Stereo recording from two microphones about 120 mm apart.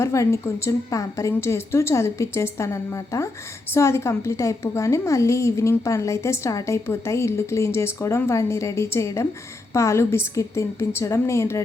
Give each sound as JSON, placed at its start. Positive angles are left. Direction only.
{"t": 0.0, "sound": "a woman's voice", "side_deg": 25}